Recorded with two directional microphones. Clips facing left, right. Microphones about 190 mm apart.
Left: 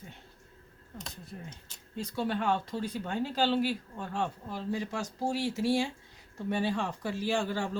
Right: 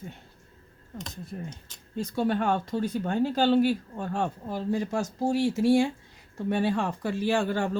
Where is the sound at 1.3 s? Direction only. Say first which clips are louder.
Right 7 dB; 50° right (ahead or behind).